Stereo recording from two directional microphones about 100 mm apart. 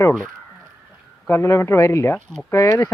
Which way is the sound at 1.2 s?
30° left (ahead or behind).